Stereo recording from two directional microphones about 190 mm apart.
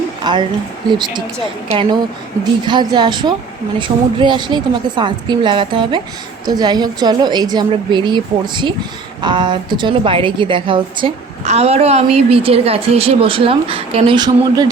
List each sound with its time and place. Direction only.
0.3 s a woman's voice: 25° right (ahead or behind)